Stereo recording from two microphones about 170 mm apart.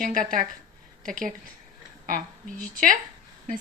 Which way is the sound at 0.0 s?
55° right (ahead or behind).